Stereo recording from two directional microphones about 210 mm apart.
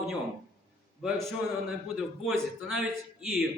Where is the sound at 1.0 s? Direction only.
Centre (ahead or behind).